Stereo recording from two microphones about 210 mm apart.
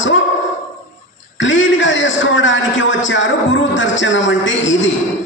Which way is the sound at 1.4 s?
65° left (ahead or behind).